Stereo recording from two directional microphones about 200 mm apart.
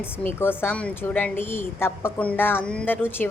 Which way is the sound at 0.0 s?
10° left (ahead or behind).